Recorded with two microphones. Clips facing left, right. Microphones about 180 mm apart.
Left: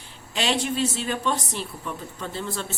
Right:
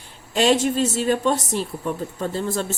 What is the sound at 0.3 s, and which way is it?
A woman's voice, 45° right (ahead or behind).